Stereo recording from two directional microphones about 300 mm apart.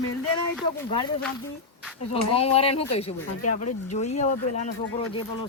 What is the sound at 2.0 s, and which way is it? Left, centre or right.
Speech, centre.